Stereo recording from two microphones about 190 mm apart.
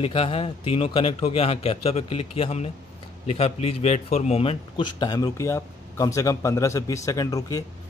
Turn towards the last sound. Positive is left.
turn(degrees=20)  # may be behind; listen again after turning